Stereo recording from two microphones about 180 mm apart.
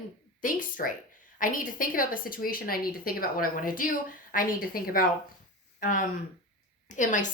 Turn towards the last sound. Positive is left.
turn(degrees=45)  # may be behind; listen again after turning